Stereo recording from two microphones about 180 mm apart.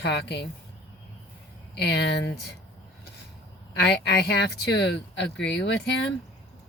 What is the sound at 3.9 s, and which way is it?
Speech, 65° left (ahead or behind).